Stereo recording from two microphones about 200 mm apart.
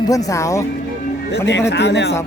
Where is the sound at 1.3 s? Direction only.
60° left (ahead or behind).